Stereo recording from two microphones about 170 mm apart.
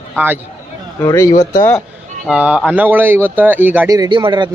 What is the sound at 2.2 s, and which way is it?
Speech, 5° right (ahead or behind).